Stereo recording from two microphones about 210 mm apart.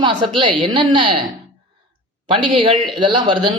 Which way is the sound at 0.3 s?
20° right (ahead or behind).